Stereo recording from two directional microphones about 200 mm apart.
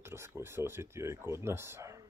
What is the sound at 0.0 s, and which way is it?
Speech, 10° right (ahead or behind).